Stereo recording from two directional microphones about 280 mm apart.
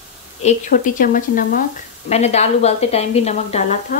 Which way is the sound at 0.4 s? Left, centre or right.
Left.